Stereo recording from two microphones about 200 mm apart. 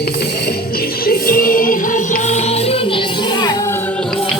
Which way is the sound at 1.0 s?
45° left (ahead or behind).